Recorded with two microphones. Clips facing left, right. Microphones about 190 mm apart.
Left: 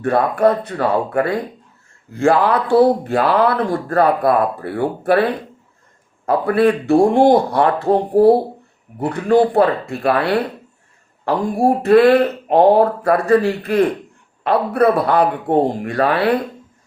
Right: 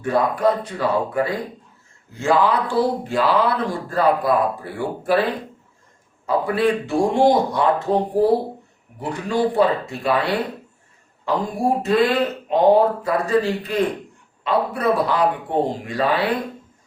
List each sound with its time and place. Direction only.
0.0 s speech: 60° left (ahead or behind)
6.2 s speech: 60° left (ahead or behind)
9.0 s speech: 60° left (ahead or behind)